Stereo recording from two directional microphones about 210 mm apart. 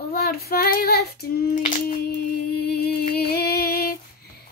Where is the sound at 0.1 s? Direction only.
45° left (ahead or behind).